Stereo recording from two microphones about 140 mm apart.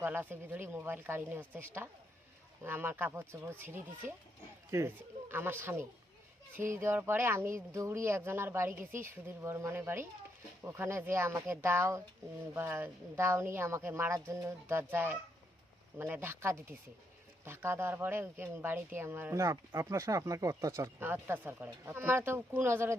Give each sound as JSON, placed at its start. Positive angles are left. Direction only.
{"t": 0.0, "sound": "speech", "side_deg": -15}